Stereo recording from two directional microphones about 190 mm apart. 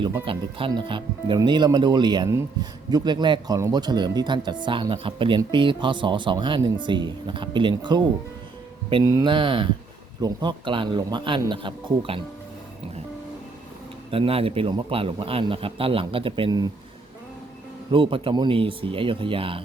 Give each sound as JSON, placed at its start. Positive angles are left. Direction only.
{"t": 0.3, "sound": "speech", "side_deg": -25}
{"t": 14.1, "sound": "speech", "side_deg": -30}
{"t": 17.9, "sound": "speech", "side_deg": -25}